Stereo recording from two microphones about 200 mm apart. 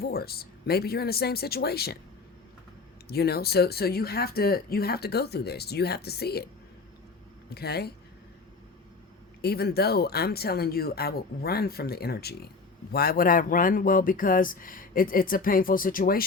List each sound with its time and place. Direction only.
0.0 s speech: 50° left (ahead or behind)
3.1 s speech: 50° left (ahead or behind)
7.5 s speech: 50° left (ahead or behind)
9.4 s speech: 55° left (ahead or behind)